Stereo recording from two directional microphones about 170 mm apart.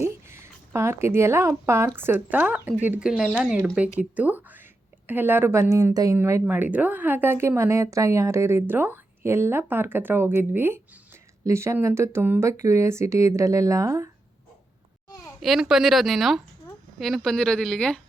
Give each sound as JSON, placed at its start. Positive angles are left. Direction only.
{"t": 0.0, "sound": "a sound", "side_deg": -15}
{"t": 2.0, "sound": "speech", "side_deg": -10}
{"t": 15.4, "sound": "speech", "side_deg": 0}